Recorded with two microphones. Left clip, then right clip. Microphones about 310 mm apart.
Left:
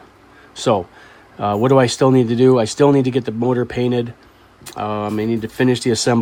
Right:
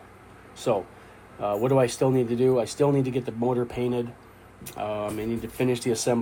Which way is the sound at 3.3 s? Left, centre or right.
Left.